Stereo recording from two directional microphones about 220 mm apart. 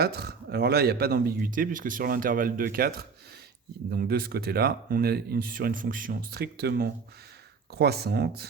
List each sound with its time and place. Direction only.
0.0 s speech: 45° right (ahead or behind)